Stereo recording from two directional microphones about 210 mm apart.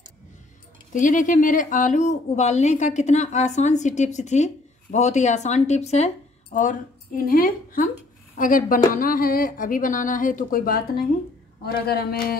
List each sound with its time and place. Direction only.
0.9 s speech: 40° left (ahead or behind)